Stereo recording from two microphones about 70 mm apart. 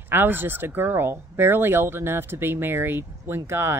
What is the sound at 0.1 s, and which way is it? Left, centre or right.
Speech, right.